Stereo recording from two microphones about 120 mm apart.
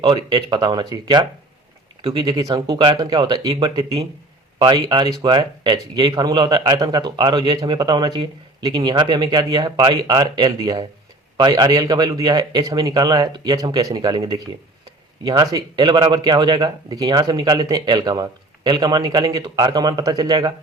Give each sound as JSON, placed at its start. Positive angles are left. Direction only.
{"t": 0.2, "sound": "speech", "side_deg": -35}